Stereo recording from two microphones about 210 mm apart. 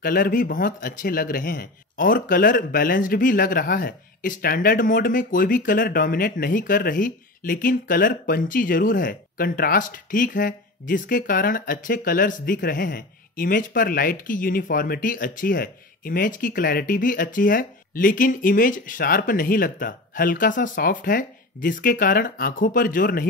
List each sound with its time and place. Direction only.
0.0 s a man's voice: 40° left (ahead or behind)